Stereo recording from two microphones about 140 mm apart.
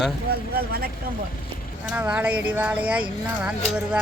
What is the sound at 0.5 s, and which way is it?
Speech, 90° right.